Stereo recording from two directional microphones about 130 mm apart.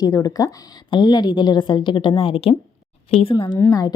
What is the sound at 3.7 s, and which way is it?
Speech, 30° left (ahead or behind).